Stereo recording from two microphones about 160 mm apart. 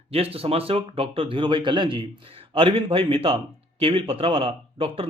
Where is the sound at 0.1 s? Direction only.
40° right (ahead or behind).